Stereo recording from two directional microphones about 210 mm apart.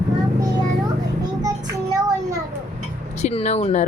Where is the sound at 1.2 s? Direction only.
15° right (ahead or behind).